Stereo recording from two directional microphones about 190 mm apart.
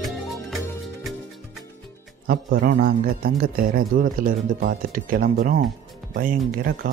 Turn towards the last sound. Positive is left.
turn(degrees=-50)  # may be behind; listen again after turning